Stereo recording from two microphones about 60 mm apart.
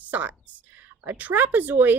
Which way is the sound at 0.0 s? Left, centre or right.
Right.